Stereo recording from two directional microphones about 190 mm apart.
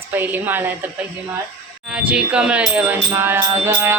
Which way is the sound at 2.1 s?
5° right (ahead or behind).